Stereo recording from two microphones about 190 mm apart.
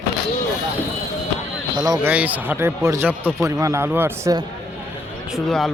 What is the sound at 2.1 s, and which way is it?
Speech, 10° right (ahead or behind).